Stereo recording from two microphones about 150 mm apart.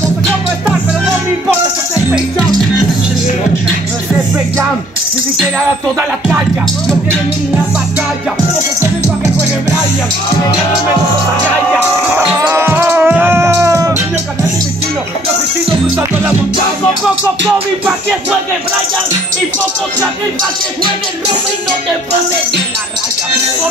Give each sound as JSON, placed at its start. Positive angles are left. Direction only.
{"t": 12.4, "sound": "music", "side_deg": -15}